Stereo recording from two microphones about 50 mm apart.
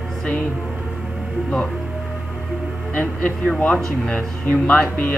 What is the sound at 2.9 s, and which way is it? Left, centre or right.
A man's voice, left.